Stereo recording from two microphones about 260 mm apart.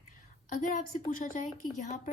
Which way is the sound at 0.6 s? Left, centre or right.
Left.